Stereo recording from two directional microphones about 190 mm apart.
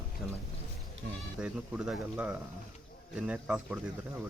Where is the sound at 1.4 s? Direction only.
5° right (ahead or behind).